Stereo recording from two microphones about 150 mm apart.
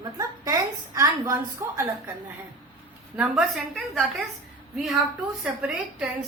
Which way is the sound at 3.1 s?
5° right (ahead or behind).